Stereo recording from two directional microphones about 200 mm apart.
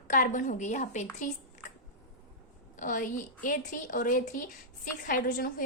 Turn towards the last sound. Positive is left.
turn(degrees=45)  # may be behind; listen again after turning